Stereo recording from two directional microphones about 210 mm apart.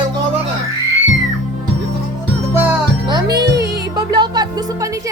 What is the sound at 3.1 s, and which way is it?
Music, 20° right (ahead or behind).